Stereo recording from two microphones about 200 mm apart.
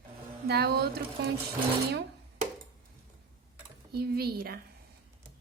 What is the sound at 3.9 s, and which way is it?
Speech, 50° right (ahead or behind).